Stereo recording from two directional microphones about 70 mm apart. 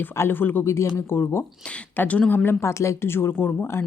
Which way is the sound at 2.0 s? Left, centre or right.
Centre.